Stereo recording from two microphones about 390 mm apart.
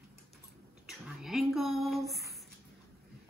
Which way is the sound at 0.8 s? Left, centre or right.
Centre.